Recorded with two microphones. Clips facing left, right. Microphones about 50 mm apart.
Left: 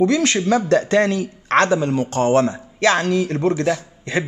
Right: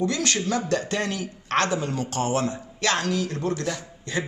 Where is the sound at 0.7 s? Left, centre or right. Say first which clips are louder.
Left 9 dB; left.